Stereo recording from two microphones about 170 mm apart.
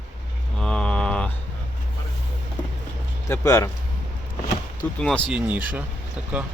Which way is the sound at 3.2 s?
20° left (ahead or behind).